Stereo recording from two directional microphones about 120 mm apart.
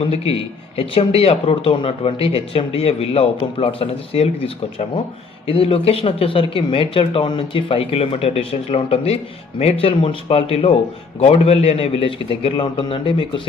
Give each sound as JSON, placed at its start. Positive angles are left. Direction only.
{"t": 0.0, "sound": "speech", "side_deg": 55}